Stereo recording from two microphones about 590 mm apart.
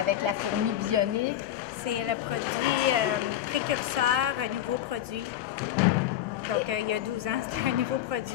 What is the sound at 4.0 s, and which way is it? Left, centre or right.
Speech, right.